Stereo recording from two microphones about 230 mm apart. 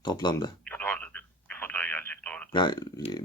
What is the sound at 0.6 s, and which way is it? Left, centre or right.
Telephone, centre.